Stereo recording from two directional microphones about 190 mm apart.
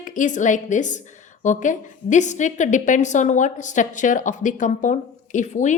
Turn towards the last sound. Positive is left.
turn(degrees=40)  # may be behind; listen again after turning